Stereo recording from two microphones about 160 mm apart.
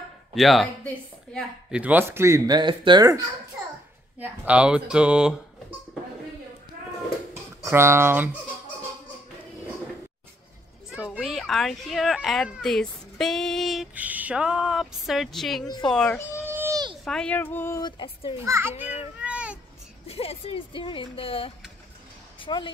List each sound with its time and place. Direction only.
0.3 s speech: centre (ahead or behind)
1.7 s speech: 10° right (ahead or behind); by 3.2 s 25° right (ahead or behind)
4.2 s speech: 5° right (ahead or behind)
7.6 s speech: 15° right (ahead or behind)
11.1 s speech: centre (ahead or behind)
16.4 s a sound: 15° right (ahead or behind)
17.0 s speech: 5° left (ahead or behind)
17.8 s speech: 30° left (ahead or behind)
18.4 s speech: 15° right (ahead or behind)
19.2 s a sound: 5° right (ahead or behind)
20.1 s speech: 40° left (ahead or behind)